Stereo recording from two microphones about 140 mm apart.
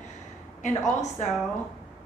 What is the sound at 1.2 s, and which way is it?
Speech, 60° left (ahead or behind).